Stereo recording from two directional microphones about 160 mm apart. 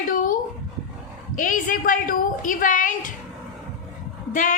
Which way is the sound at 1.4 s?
55° left (ahead or behind).